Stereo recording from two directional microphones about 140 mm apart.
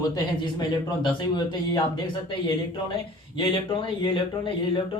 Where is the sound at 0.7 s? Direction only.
30° left (ahead or behind).